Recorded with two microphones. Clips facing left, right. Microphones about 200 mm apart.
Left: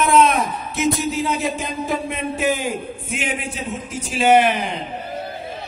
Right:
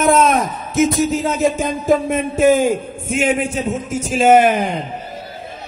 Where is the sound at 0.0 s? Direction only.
45° right (ahead or behind).